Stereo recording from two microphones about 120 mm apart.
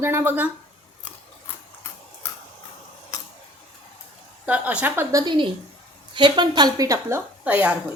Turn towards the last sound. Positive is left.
turn(degrees=-10)  # may be behind; listen again after turning